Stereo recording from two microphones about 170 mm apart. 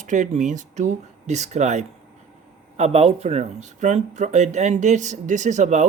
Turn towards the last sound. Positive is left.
turn(degrees=-45)  # may be behind; listen again after turning